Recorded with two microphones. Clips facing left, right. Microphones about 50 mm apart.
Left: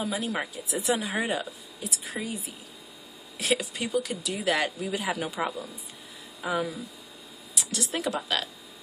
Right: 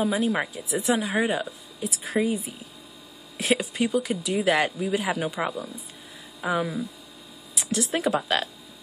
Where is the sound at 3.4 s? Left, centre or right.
Centre.